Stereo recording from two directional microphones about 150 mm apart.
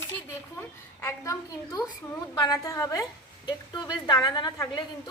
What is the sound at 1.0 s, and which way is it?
A woman's voice, 20° left (ahead or behind).